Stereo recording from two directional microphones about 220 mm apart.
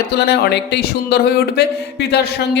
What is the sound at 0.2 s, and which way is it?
Speech, 50° left (ahead or behind).